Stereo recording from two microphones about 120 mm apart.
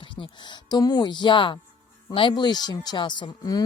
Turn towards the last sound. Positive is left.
turn(degrees=35)  # may be behind; listen again after turning